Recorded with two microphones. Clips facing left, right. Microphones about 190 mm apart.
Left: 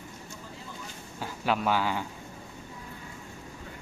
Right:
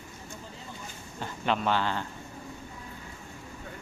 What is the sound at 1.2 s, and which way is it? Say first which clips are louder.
Speech: even; 5° left (ahead or behind).